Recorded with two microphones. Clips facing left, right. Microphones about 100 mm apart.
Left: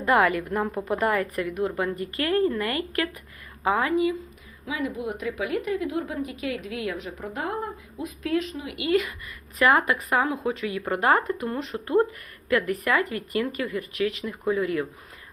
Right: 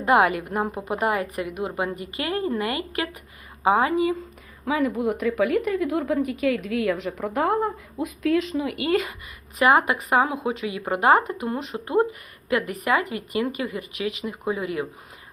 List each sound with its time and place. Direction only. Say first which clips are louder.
0.0 s a woman's voice: right 2 dB; 20° right (ahead or behind)
4.9 s a woman's voice: right 6 dB; 65° right (ahead or behind)
6.8 s a woman's voice: right 6 dB; 80° right
8.8 s speech: left 2 dB; 30° right (ahead or behind)
9.6 s speech: right 2 dB; 15° right (ahead or behind)